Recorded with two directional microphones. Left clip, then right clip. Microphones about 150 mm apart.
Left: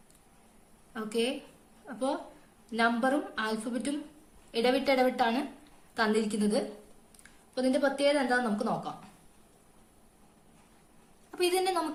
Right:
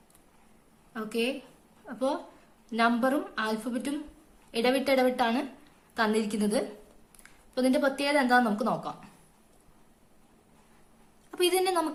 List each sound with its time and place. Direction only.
0.9 s a woman's voice: 15° right (ahead or behind)
11.3 s a woman's voice: 25° right (ahead or behind)